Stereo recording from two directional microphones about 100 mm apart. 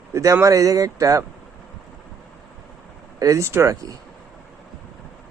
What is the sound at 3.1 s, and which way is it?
Speech, 35° right (ahead or behind).